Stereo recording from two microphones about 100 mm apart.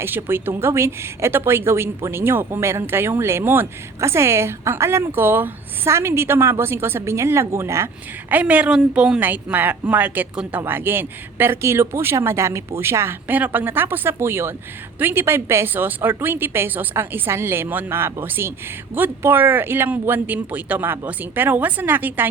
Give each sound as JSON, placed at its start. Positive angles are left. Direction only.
{"t": 0.0, "sound": "a woman's voice", "side_deg": -25}
{"t": 8.3, "sound": "a woman's voice", "side_deg": -15}